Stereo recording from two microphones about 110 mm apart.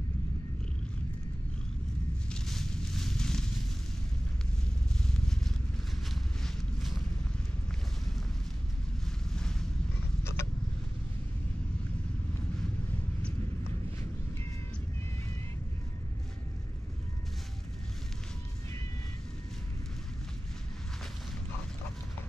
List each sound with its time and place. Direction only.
2.3 s a sound: 5° left (ahead or behind)
6.4 s walk: centre (ahead or behind)
9.3 s vehicle: 5° left (ahead or behind)
10.2 s vehicle: 25° left (ahead or behind)